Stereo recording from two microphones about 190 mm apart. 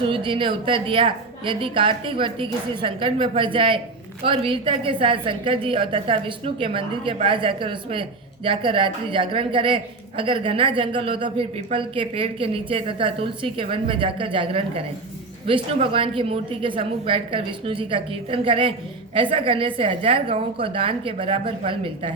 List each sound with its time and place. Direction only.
0.0 s a woman's voice: 25° right (ahead or behind)